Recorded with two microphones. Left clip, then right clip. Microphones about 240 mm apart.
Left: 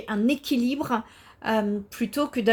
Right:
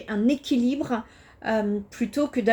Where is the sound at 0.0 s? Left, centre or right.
Left.